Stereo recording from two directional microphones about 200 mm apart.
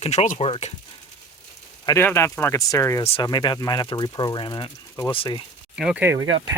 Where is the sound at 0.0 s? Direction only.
35° left (ahead or behind).